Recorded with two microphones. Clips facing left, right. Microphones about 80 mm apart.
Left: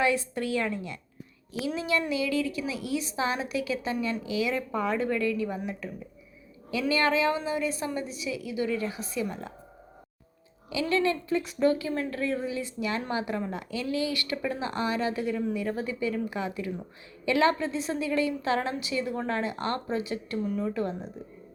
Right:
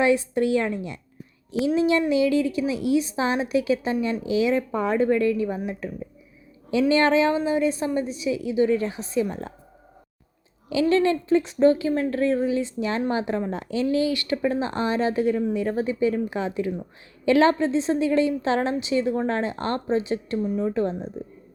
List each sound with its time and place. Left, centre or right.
0.0 s a woman's voice: right
10.7 s a woman's voice: right